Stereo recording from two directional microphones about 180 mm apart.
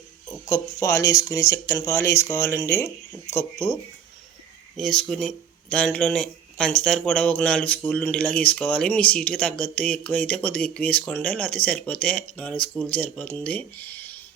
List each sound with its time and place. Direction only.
0.4 s speech: 15° left (ahead or behind)
4.8 s speech: 5° left (ahead or behind)